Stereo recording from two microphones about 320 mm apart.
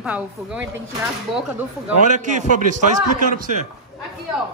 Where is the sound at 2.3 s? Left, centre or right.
Right.